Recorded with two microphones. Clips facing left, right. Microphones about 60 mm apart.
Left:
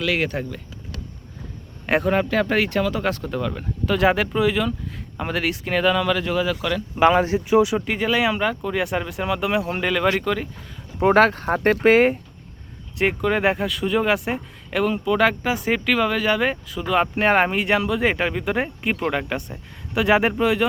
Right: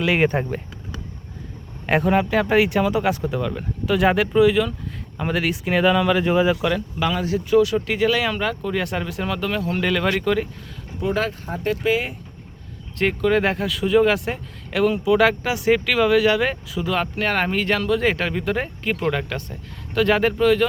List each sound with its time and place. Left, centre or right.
0.0 s speech: right
1.9 s speech: centre
6.9 s speech: left
7.3 s speech: centre
7.9 s speech: centre
11.0 s speech: left
13.0 s speech: centre
17.0 s speech: left